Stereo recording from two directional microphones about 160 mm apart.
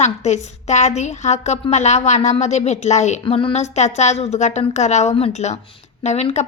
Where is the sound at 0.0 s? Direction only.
45° left (ahead or behind).